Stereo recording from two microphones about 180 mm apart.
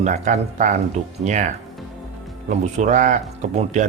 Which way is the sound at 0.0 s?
40° right (ahead or behind).